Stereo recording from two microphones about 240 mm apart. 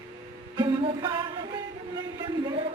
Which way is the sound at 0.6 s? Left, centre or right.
Centre.